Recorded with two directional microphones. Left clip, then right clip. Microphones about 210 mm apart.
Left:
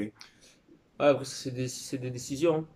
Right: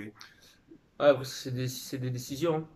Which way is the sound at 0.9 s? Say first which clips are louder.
Right 1 dB; 5° left (ahead or behind).